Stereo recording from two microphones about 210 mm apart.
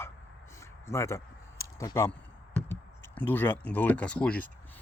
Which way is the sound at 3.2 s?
10° left (ahead or behind).